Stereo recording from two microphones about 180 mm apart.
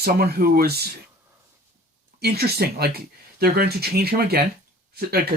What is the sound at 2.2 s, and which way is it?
Speech, 60° right (ahead or behind).